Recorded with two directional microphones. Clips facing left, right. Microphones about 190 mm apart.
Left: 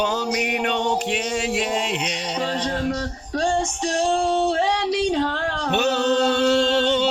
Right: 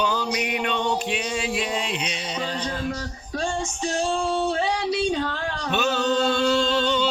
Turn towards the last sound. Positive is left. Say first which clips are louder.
# left 3 dB
turn(degrees=70)  # may be behind; listen again after turning